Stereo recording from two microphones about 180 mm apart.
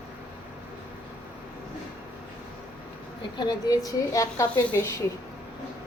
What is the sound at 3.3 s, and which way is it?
A woman's voice, 25° left (ahead or behind).